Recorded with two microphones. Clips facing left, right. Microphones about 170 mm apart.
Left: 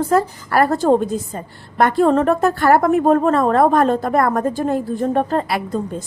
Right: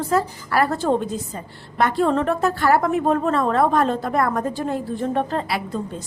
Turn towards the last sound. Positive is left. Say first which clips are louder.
# left 5 dB
turn(degrees=50)  # may be behind; listen again after turning